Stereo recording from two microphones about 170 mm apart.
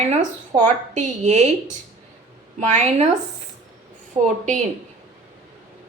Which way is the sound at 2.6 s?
45° right (ahead or behind).